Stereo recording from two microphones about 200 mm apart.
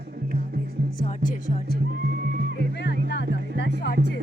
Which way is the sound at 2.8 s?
60° left (ahead or behind).